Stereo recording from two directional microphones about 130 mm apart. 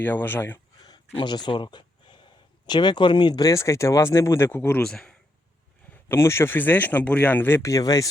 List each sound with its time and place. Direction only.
0.0 s speech: 15° left (ahead or behind)
0.9 s a sound: 35° left (ahead or behind)
2.6 s speech: 35° left (ahead or behind); by 4.8 s 15° left (ahead or behind)
4.8 s speech: 5° left (ahead or behind)
6.1 s speech: 20° left (ahead or behind)